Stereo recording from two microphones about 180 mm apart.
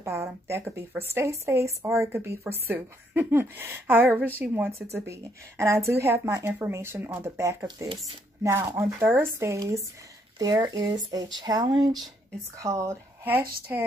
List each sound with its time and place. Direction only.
0.0 s a woman's voice: 15° right (ahead or behind)